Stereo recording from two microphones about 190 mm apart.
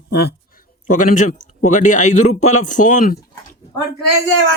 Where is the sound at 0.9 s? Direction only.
40° left (ahead or behind).